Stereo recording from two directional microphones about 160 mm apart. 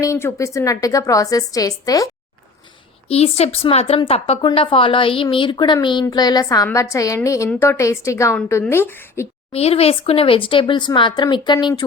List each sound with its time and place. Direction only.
0.0 s a woman's voice: 15° left (ahead or behind)
3.1 s a woman's voice: 40° left (ahead or behind); by 9.2 s 15° left (ahead or behind)
9.5 s a woman's voice: 40° left (ahead or behind)